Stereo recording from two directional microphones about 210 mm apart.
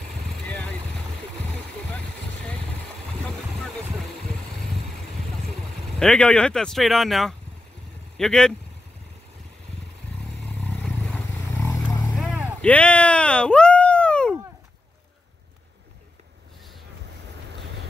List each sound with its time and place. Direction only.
0.5 s vehicle: 5° left (ahead or behind)
1.9 s vehicle: 5° left (ahead or behind)
5.9 s speech: 5° left (ahead or behind)
10.6 s vehicle: 5° left (ahead or behind)
12.6 s a sound: 5° left (ahead or behind)
17.5 s vehicle: 55° right (ahead or behind)